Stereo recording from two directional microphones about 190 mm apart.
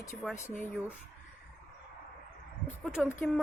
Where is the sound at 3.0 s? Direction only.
5° left (ahead or behind).